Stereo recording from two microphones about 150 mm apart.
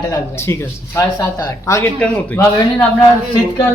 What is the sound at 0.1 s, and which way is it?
A man's voice, 15° left (ahead or behind).